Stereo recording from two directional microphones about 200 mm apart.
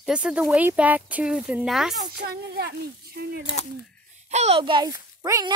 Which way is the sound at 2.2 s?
40° right (ahead or behind).